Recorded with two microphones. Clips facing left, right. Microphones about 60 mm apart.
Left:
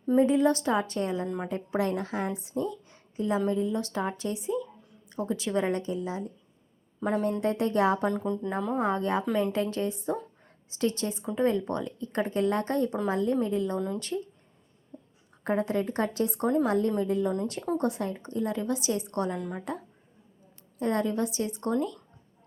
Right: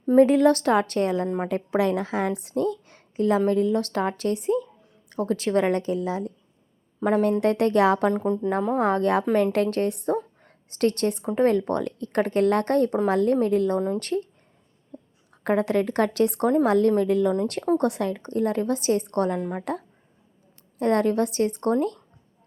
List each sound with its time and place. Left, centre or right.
0.2 s a woman's voice: right
1.5 s a woman's voice: right
7.0 s a woman's voice: right
8.1 s speech: right
8.7 s a woman's voice: right
14.9 s a sound: right
15.4 s a woman's voice: right
16.6 s a woman's voice: right
17.4 s a woman's voice: right
20.7 s a woman's voice: right